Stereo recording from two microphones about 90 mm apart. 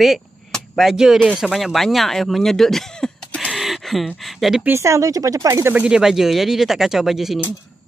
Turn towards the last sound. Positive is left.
turn(degrees=-5)  # may be behind; listen again after turning